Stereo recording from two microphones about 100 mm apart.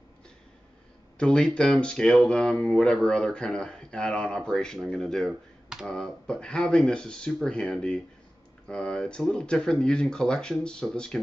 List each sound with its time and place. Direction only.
1.1 s speech: 10° left (ahead or behind)